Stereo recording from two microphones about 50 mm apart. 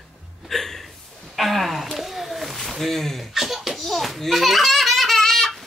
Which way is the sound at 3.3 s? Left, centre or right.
Centre.